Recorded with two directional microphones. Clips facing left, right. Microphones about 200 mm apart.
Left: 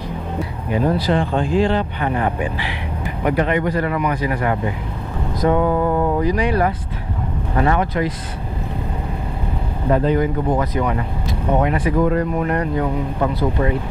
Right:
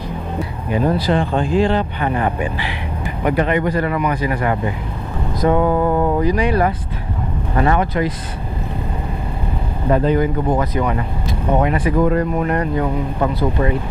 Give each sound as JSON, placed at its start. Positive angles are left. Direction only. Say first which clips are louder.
{"t": 0.8, "sound": "speech", "louder": "right 1 dB", "side_deg": -20}
{"t": 9.8, "sound": "speech", "louder": "right 1 dB", "side_deg": -20}